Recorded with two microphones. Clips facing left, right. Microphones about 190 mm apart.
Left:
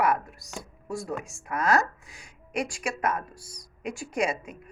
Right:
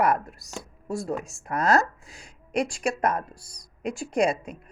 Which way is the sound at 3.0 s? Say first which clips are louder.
Right 3 dB; 35° right (ahead or behind).